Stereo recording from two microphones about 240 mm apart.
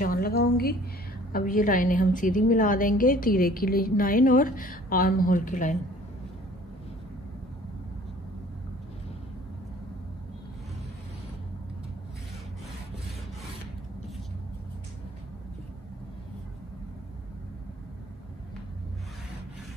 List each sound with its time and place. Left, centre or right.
0.0 s a woman's voice: left